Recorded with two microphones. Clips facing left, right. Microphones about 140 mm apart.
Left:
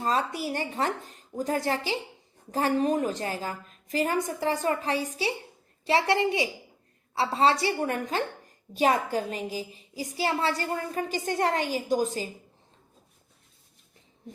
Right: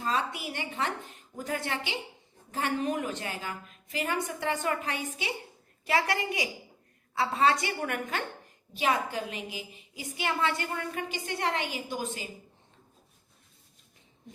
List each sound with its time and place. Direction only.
0.0 s a woman's voice: 40° left (ahead or behind)